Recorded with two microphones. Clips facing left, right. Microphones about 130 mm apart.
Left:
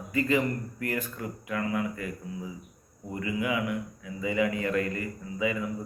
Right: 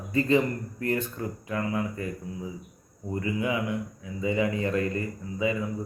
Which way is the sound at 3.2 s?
25° right (ahead or behind).